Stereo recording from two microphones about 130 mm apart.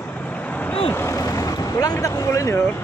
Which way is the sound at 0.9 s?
20° left (ahead or behind).